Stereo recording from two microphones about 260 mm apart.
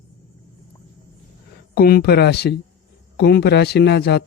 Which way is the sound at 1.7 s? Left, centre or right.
Left.